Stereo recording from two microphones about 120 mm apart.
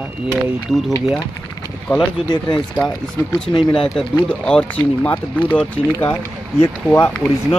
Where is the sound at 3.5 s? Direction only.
45° left (ahead or behind).